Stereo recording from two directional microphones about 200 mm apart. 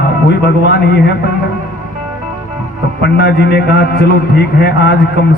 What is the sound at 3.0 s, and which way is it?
A man's voice, 60° left (ahead or behind).